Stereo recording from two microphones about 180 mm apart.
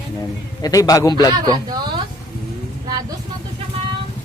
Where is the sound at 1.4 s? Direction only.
20° right (ahead or behind).